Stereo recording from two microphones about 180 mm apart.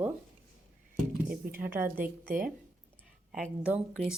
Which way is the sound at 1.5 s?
10° right (ahead or behind).